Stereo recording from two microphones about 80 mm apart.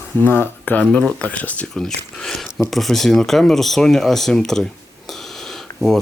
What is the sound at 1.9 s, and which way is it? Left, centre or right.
Speech, centre.